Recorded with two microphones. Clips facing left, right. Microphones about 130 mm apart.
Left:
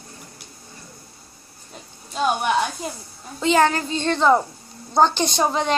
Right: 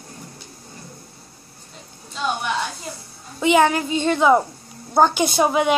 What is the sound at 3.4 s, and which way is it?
A woman's voice, 15° right (ahead or behind).